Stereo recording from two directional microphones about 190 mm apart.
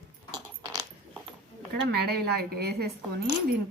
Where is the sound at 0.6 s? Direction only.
20° right (ahead or behind).